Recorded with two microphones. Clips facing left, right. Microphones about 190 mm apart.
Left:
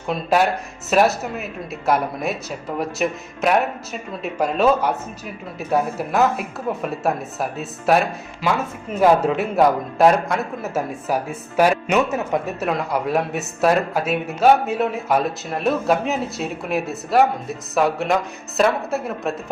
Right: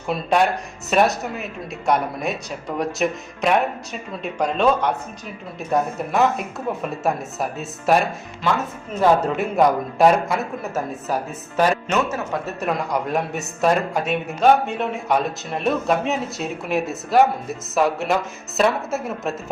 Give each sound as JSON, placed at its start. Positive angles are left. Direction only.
{"t": 0.1, "sound": "a woman's voice", "side_deg": 5}
{"t": 10.8, "sound": "a woman's voice", "side_deg": 10}
{"t": 12.5, "sound": "a woman's voice", "side_deg": 5}